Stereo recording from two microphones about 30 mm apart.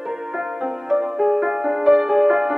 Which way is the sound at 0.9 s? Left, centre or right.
Centre.